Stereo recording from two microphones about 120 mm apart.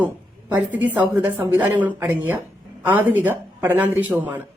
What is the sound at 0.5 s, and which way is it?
Speech, 15° right (ahead or behind).